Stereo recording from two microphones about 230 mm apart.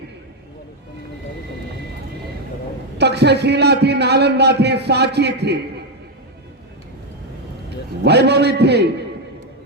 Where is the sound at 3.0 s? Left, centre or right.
Right.